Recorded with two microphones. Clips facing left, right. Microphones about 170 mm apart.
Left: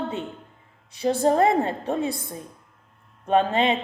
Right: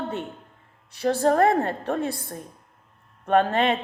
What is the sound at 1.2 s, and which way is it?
A woman's voice, 15° left (ahead or behind).